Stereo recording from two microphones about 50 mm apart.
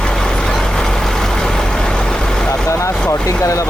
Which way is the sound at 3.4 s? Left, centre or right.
Left.